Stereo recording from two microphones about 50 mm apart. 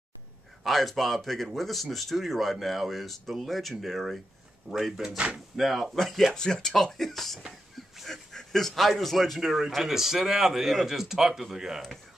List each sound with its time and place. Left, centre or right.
0.7 s speech: centre
4.7 s a man's voice: centre
5.1 s speech: right
5.6 s speech: centre
6.3 s speech: centre
9.7 s a man's voice: centre